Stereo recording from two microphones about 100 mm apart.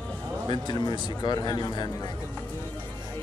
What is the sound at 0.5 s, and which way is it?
Speech, 45° left (ahead or behind).